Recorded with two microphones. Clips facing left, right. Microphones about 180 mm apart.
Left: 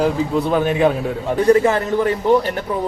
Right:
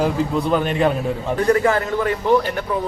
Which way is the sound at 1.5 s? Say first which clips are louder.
Left 2 dB; 25° left (ahead or behind).